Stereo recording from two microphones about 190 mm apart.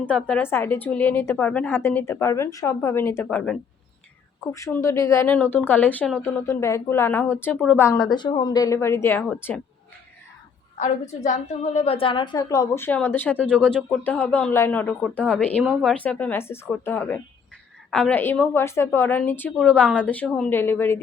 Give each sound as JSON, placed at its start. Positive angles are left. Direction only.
{"t": 0.0, "sound": "a woman's voice", "side_deg": 5}
{"t": 4.5, "sound": "a woman's voice", "side_deg": 15}
{"t": 11.1, "sound": "a woman's voice", "side_deg": 40}
{"t": 15.6, "sound": "a woman's voice", "side_deg": -5}